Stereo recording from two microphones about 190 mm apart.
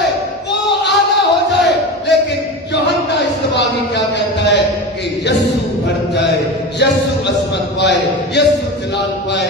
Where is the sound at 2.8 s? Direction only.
65° left (ahead or behind).